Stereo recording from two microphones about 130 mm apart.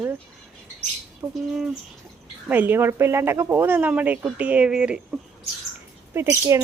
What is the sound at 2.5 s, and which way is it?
Speech, 15° right (ahead or behind).